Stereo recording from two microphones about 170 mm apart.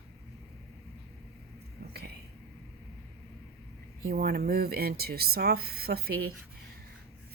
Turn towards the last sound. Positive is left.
turn(degrees=-65)  # may be behind; listen again after turning